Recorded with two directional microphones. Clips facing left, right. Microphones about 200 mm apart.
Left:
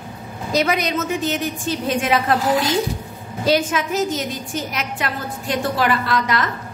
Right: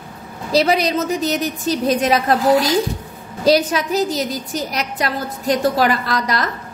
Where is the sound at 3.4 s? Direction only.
35° right (ahead or behind).